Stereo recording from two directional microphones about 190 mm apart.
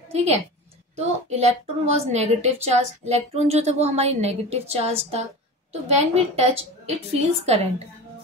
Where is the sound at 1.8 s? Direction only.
35° right (ahead or behind).